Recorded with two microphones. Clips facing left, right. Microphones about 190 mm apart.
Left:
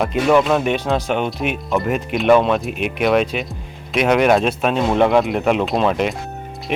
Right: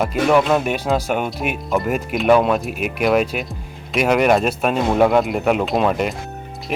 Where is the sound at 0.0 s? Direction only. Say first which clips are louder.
Left 1 dB; 5° right (ahead or behind).